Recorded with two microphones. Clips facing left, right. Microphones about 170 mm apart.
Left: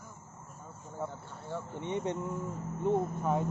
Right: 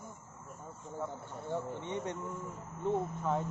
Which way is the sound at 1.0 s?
15° right (ahead or behind).